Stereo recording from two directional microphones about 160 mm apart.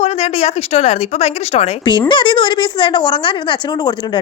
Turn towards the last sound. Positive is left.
turn(degrees=25)  # may be behind; listen again after turning